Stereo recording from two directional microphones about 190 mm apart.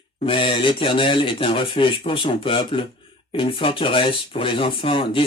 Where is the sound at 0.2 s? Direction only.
25° left (ahead or behind).